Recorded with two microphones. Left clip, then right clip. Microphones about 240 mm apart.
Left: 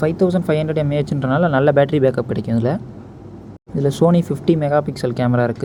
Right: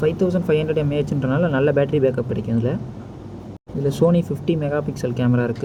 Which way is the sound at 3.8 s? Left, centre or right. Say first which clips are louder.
Left 2 dB; left.